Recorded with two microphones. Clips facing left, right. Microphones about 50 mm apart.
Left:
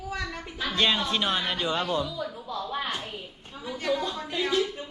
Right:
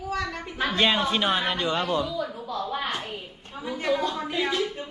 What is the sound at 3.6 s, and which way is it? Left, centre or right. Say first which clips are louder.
Speech: right 3 dB; centre.